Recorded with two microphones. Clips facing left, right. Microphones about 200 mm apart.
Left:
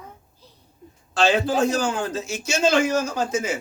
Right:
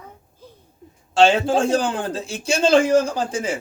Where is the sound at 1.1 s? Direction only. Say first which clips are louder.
Right 4 dB; 25° right (ahead or behind).